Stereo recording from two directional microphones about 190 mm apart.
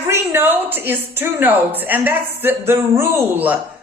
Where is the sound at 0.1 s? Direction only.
10° right (ahead or behind).